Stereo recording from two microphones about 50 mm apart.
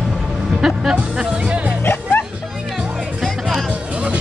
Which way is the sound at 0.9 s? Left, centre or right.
Right.